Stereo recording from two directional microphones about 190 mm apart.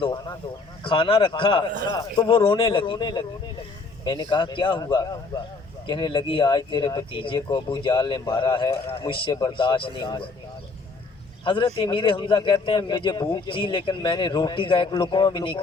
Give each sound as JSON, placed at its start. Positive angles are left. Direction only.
{"t": 0.0, "sound": "speech", "side_deg": 25}
{"t": 4.3, "sound": "speech", "side_deg": 25}
{"t": 11.4, "sound": "speech", "side_deg": 25}